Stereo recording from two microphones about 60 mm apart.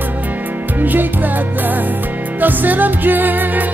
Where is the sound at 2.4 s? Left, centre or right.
Right.